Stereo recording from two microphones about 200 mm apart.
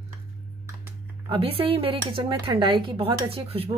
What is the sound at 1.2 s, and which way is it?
Speech, 30° right (ahead or behind).